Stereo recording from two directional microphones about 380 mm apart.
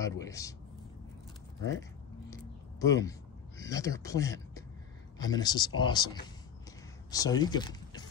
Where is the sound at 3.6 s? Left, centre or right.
Centre.